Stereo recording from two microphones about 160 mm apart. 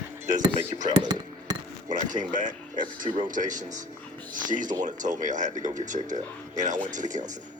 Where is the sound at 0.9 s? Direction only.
25° right (ahead or behind).